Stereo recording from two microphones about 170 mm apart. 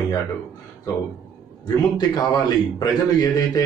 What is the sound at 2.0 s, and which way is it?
A man's voice, 25° left (ahead or behind).